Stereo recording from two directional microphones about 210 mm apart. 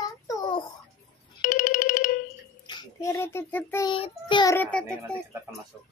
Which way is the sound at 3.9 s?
25° left (ahead or behind).